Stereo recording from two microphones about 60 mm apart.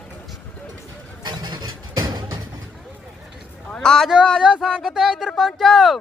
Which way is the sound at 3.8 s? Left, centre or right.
Centre.